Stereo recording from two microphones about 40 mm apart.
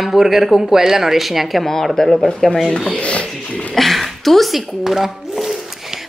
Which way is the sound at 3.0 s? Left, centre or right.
Left.